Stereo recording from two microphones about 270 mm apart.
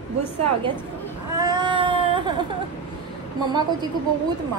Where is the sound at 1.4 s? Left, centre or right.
Centre.